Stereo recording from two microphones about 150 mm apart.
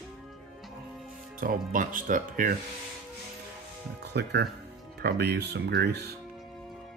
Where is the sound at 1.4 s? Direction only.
65° right (ahead or behind).